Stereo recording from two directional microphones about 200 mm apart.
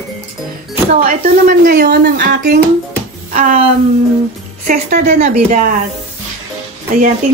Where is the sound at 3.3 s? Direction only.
40° right (ahead or behind).